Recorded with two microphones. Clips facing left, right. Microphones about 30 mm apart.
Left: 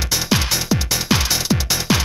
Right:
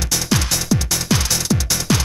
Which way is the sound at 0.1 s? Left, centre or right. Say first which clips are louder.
Left 1 dB; centre.